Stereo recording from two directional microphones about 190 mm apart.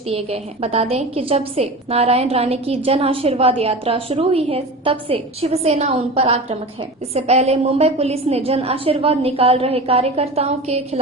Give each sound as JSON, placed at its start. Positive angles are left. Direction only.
{"t": 0.1, "sound": "a woman's voice", "side_deg": -30}